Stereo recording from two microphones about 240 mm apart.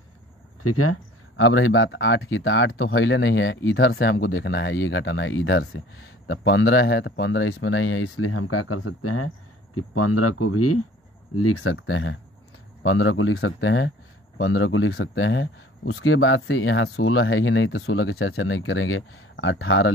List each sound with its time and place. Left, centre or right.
0.6 s speech: left